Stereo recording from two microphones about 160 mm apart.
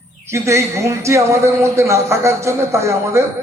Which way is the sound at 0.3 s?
20° right (ahead or behind).